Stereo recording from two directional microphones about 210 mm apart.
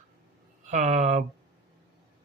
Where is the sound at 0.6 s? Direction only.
35° right (ahead or behind).